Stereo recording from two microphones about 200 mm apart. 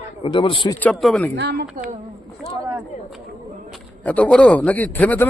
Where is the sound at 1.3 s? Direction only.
55° right (ahead or behind).